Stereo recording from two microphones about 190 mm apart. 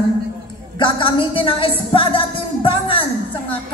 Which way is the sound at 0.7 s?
25° left (ahead or behind).